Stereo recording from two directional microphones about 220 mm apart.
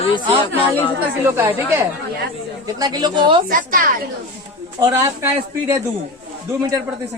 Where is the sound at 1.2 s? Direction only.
10° right (ahead or behind).